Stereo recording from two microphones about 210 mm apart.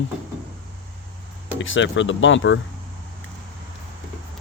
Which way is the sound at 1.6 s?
65° left (ahead or behind).